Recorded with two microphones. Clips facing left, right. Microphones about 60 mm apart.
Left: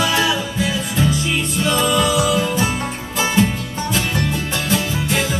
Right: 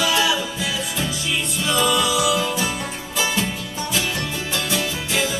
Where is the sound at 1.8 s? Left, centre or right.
Left.